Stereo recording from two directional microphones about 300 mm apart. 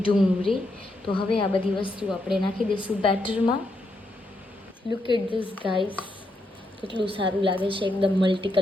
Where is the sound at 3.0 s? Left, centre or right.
Centre.